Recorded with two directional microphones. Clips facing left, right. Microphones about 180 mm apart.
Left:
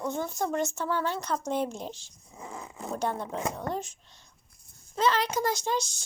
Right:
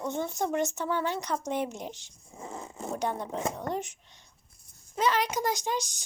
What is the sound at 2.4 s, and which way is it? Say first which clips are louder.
Zipper: right 1 dB; 25° right (ahead or behind).